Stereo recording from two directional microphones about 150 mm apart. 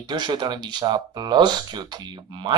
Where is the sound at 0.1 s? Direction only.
30° right (ahead or behind).